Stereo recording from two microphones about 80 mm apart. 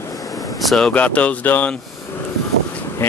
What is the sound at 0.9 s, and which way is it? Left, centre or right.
Speech, centre.